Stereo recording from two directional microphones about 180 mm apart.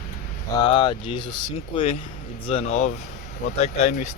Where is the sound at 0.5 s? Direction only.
25° left (ahead or behind).